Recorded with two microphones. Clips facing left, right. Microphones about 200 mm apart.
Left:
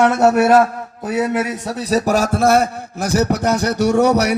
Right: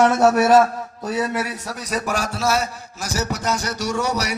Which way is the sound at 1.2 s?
20° left (ahead or behind).